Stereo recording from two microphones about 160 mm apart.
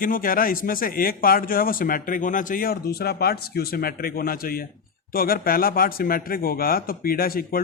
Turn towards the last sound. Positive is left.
turn(degrees=65)  # may be behind; listen again after turning